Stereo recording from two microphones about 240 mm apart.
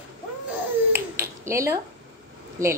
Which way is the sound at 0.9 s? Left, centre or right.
Centre.